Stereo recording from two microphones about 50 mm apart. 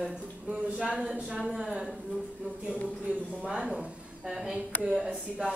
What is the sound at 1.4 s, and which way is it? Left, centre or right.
Speech, centre.